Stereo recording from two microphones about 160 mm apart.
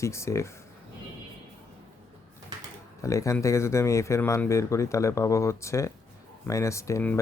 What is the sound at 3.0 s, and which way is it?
Speech, 20° left (ahead or behind).